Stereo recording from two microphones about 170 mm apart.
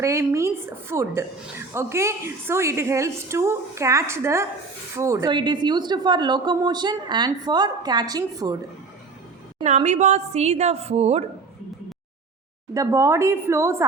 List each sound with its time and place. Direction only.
0.0 s a woman's voice: 15° right (ahead or behind)
9.6 s a woman's voice: 45° right (ahead or behind)
12.7 s a woman's voice: 20° right (ahead or behind)